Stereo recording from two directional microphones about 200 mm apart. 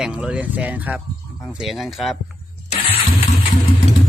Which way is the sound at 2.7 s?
30° left (ahead or behind).